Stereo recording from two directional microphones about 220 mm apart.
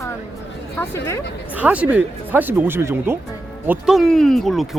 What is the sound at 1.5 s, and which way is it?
Speech, 5° right (ahead or behind).